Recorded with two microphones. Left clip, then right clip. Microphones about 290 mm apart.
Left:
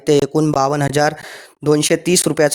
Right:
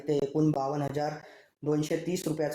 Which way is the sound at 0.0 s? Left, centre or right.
Left.